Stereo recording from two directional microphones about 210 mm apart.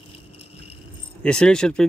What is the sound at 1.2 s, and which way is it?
Speech, 5° left (ahead or behind).